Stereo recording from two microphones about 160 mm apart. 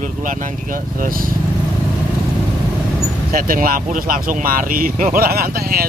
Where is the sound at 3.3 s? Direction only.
65° right (ahead or behind).